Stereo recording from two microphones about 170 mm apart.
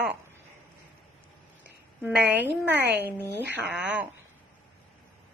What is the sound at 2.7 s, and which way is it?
Speech, 90° right.